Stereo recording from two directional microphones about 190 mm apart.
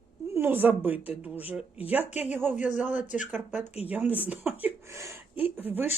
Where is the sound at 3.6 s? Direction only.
35° left (ahead or behind).